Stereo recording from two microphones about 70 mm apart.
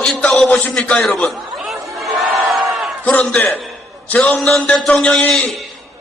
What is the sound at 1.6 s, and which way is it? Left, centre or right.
Crowd, centre.